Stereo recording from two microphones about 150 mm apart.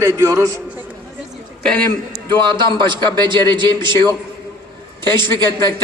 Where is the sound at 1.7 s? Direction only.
10° left (ahead or behind).